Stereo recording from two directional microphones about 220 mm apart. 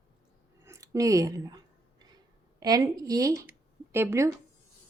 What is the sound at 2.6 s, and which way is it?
Speech, 15° right (ahead or behind).